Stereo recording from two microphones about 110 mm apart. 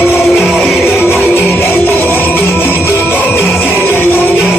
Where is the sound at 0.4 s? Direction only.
Centre (ahead or behind).